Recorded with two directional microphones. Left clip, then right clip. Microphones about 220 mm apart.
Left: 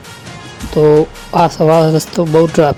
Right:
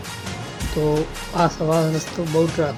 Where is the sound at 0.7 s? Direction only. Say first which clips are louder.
Left 13 dB; 30° left (ahead or behind).